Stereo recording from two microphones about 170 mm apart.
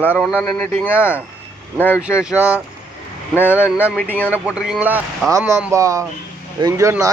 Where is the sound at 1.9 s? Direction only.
5° right (ahead or behind).